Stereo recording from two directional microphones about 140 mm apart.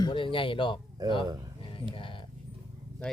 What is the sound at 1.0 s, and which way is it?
Speech, 25° right (ahead or behind).